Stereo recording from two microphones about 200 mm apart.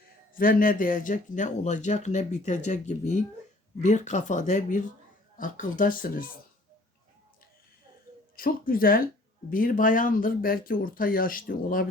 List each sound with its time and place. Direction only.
0.3 s speech: 45° left (ahead or behind)
8.4 s speech: 45° left (ahead or behind)